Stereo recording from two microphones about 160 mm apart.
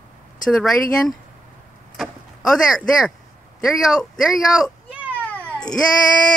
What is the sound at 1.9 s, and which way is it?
Vehicle, centre (ahead or behind).